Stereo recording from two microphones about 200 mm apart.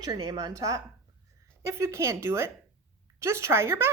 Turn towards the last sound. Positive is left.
turn(degrees=-10)  # may be behind; listen again after turning